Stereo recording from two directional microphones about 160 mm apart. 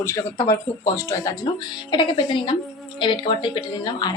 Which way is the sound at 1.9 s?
30° left (ahead or behind).